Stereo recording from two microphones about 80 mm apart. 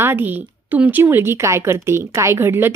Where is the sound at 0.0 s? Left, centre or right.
Right.